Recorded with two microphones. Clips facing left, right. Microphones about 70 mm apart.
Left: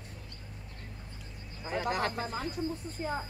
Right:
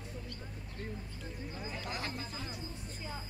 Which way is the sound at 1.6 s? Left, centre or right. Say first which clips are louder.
Left 11 dB; left.